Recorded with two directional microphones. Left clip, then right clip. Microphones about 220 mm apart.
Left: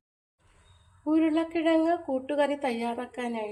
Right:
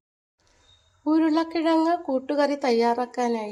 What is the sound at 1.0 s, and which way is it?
A woman's voice, 30° right (ahead or behind).